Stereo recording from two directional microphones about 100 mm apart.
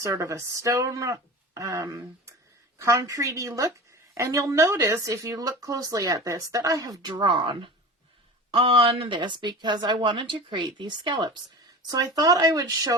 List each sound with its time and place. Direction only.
0.0 s speech: 30° right (ahead or behind)
7.2 s a woman's voice: 55° right (ahead or behind)
8.4 s a woman's voice: 70° right (ahead or behind); by 11.3 s 50° right (ahead or behind)
11.9 s speech: 40° right (ahead or behind)